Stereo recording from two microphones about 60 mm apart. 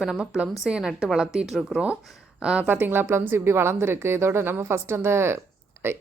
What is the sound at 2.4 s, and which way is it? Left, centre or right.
Speech, centre.